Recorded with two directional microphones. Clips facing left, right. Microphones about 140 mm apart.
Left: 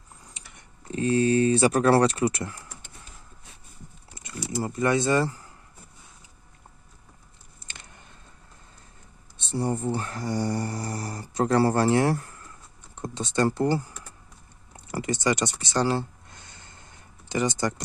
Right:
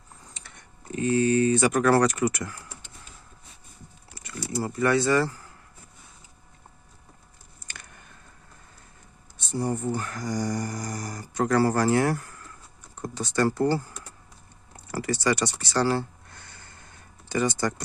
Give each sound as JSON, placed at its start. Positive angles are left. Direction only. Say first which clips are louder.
{"t": 0.9, "sound": "speech", "louder": "even", "side_deg": 30}
{"t": 4.1, "sound": "speech", "louder": "even", "side_deg": 20}
{"t": 9.4, "sound": "speech", "louder": "left 1 dB", "side_deg": 30}
{"t": 14.8, "sound": "speech", "louder": "even", "side_deg": 20}
{"t": 15.6, "sound": "a sound", "louder": "even", "side_deg": 20}